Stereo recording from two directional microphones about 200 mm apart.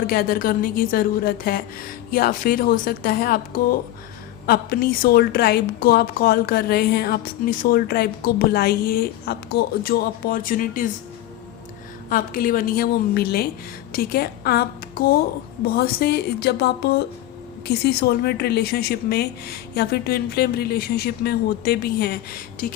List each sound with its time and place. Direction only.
0.1 s a woman's voice: 45° left (ahead or behind)
12.0 s a woman's voice: 45° left (ahead or behind)